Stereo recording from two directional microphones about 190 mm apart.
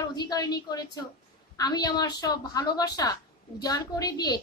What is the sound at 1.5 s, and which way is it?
A woman's voice, 20° left (ahead or behind).